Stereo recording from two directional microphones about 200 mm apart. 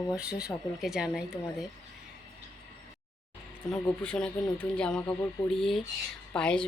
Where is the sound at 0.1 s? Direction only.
5° right (ahead or behind).